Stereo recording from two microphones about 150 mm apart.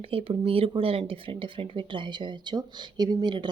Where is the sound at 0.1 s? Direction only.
40° right (ahead or behind).